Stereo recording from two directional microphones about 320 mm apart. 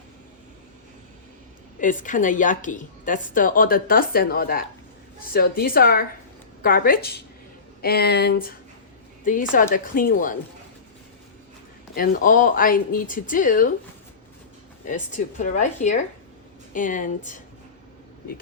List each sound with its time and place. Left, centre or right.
1.8 s a woman's voice: left
11.9 s a woman's voice: left
14.8 s a woman's voice: left